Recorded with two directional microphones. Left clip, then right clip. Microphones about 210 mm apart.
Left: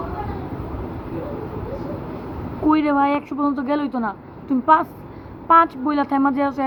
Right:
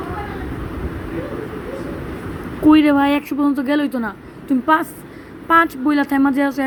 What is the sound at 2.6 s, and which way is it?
Speech, 25° right (ahead or behind).